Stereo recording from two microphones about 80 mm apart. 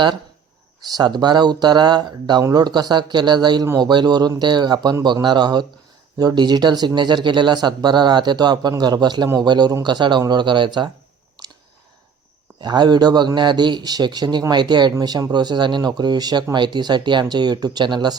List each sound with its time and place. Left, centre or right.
0.9 s speech: right
2.4 s speech: right
12.6 s speech: right